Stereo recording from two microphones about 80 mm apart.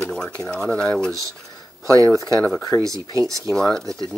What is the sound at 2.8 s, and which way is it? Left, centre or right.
Speech, right.